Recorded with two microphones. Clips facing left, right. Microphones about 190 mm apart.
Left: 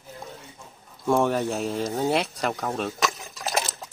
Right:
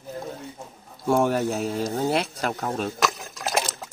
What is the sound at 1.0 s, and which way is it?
Speech, centre (ahead or behind).